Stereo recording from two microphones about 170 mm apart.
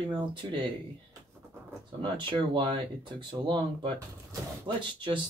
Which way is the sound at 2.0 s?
30° right (ahead or behind).